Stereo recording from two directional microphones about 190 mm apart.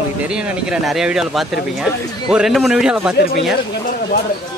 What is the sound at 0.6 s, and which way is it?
Speech, 5° right (ahead or behind).